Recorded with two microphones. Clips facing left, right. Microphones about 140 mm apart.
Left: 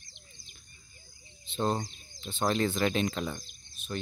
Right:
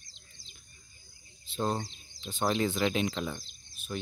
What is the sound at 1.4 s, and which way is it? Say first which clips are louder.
Bird: left 2 dB; 5° right (ahead or behind).